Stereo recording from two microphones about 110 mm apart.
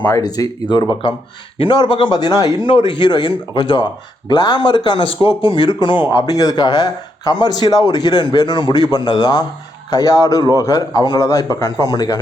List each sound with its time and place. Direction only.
0.2 s speech: 35° left (ahead or behind)
9.9 s speech: 30° left (ahead or behind)